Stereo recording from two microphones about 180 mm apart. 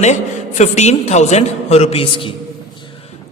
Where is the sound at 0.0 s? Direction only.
40° left (ahead or behind).